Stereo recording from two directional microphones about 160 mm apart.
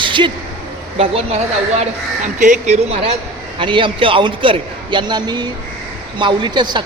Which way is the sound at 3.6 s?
30° right (ahead or behind).